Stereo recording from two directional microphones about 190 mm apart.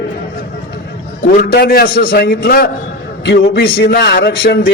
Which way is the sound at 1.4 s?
55° left (ahead or behind).